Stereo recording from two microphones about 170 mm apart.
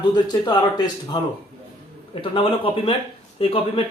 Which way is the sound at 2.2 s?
30° left (ahead or behind).